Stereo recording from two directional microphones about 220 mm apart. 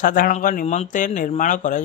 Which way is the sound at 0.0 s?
40° left (ahead or behind).